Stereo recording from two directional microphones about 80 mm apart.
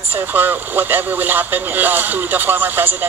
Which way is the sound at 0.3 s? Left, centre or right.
Right.